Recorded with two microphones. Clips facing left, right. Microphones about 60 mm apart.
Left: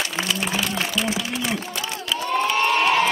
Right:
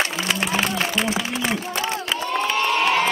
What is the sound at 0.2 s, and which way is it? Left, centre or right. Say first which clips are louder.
Applause: right 2 dB; right.